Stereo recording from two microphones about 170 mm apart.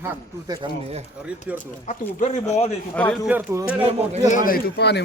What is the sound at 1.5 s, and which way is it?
Speech, 10° right (ahead or behind).